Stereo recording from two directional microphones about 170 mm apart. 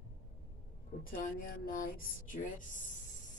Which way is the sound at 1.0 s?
55° left (ahead or behind).